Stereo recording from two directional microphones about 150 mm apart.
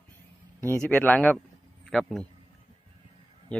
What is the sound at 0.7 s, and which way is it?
Speech, 10° left (ahead or behind).